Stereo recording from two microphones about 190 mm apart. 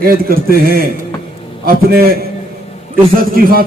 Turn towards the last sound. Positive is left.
turn(degrees=-50)  # may be behind; listen again after turning